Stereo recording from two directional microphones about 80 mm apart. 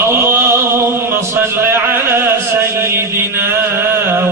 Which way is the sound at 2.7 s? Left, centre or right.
Right.